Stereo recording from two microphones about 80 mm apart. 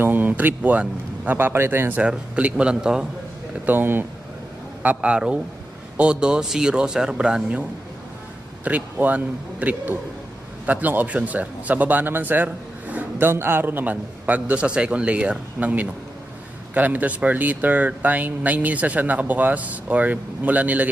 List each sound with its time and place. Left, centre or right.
0.0 s speech: right
3.6 s speech: right
4.8 s speech: centre
8.6 s speech: right